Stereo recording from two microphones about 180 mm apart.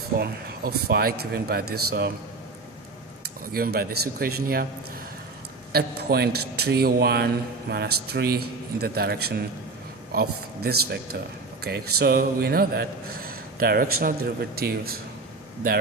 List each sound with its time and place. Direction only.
0.2 s a man's voice: 60° right (ahead or behind)
3.4 s a man's voice: 55° right (ahead or behind)
5.7 s a man's voice: 60° right (ahead or behind)